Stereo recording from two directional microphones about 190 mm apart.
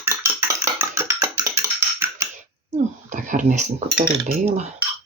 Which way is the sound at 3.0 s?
40° right (ahead or behind).